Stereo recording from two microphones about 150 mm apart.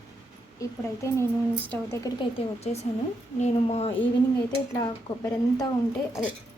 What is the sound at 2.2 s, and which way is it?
A woman's voice, 40° left (ahead or behind).